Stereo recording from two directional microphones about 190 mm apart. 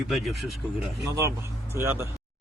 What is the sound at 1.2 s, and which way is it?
Speech, 15° right (ahead or behind).